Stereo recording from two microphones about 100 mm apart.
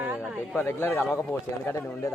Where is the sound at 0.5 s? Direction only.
20° left (ahead or behind).